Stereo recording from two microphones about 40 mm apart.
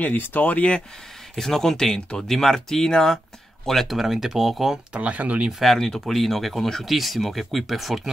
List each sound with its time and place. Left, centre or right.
0.0 s speech: left
1.3 s speech: centre
3.9 s speech: centre
4.9 s speech: right
5.5 s speech: centre